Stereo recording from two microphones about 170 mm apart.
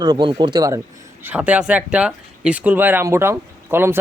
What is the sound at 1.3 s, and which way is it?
Speech, 10° right (ahead or behind).